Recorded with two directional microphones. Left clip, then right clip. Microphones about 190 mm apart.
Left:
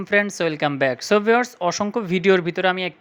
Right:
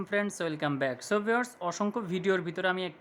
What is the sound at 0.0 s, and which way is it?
Speech, 20° left (ahead or behind).